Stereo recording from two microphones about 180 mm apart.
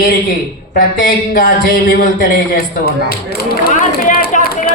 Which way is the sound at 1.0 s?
50° left (ahead or behind).